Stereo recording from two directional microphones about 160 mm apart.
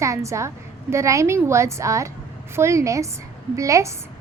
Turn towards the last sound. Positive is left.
turn(degrees=-20)  # may be behind; listen again after turning